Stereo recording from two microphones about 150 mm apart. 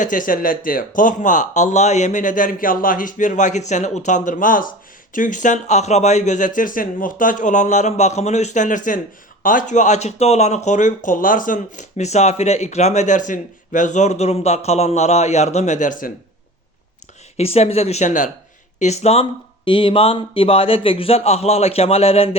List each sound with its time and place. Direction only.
0.0 s speech: 65° left (ahead or behind)
17.3 s speech: 45° left (ahead or behind)